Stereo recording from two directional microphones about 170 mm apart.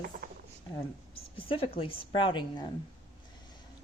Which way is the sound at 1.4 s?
30° left (ahead or behind).